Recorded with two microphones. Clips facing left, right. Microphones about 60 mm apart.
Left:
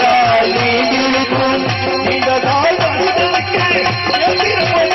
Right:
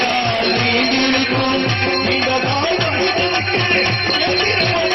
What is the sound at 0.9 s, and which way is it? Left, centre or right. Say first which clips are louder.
Music: left 2 dB; left.